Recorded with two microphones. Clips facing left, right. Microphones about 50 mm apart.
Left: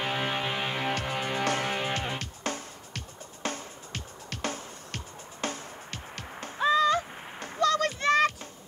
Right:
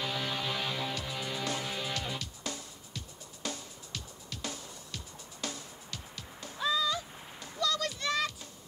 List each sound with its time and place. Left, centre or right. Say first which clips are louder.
0.0 s music: left 5 dB; left